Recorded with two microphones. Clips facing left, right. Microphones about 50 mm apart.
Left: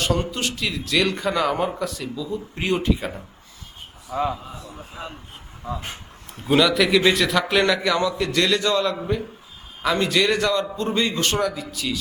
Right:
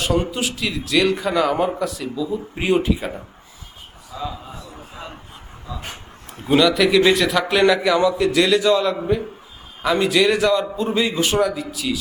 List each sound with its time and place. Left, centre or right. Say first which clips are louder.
0.0 s a man's voice: right 3 dB; centre
4.1 s speech: left 5 dB; left
6.4 s a man's voice: right 2 dB; centre